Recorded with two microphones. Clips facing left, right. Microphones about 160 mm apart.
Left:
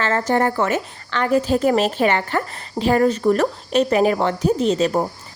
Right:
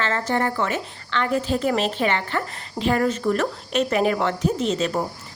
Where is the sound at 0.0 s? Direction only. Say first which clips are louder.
Left 4 dB; 45° left (ahead or behind).